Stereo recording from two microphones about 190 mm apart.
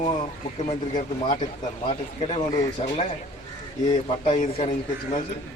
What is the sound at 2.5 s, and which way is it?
Speech, 20° left (ahead or behind).